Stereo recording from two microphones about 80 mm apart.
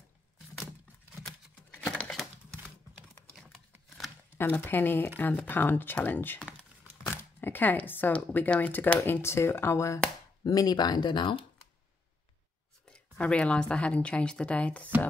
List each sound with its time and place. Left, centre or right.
1.9 s crumpling: centre
4.4 s speech: left
10.4 s speech: left
12.9 s a woman's voice: centre